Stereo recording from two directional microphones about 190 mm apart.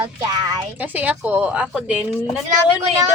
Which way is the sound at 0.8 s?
10° right (ahead or behind).